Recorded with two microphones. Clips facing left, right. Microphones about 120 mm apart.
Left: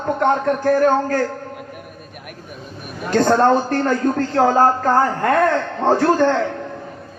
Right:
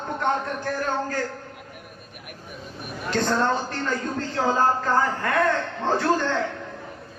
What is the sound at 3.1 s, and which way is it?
Speech, 45° left (ahead or behind).